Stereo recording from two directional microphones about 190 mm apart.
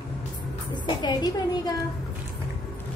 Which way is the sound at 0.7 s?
25° left (ahead or behind).